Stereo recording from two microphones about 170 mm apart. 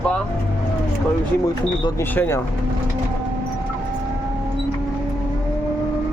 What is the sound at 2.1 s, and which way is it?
Speech, 10° left (ahead or behind).